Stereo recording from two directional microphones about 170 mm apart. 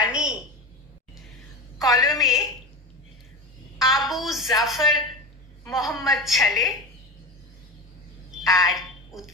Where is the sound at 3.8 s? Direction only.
Centre (ahead or behind).